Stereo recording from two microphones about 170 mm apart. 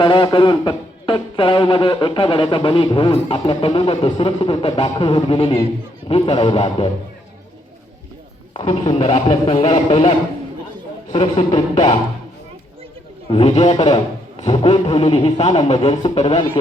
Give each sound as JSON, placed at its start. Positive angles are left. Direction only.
{"t": 0.0, "sound": "speech", "side_deg": 30}
{"t": 8.5, "sound": "speech", "side_deg": 35}
{"t": 13.2, "sound": "speech", "side_deg": 35}